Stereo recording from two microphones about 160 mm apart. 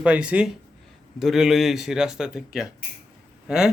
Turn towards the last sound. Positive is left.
turn(degrees=-5)  # may be behind; listen again after turning